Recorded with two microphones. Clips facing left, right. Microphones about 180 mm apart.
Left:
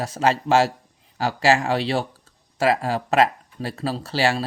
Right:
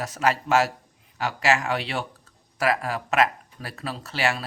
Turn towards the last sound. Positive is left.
turn(degrees=30)  # may be behind; listen again after turning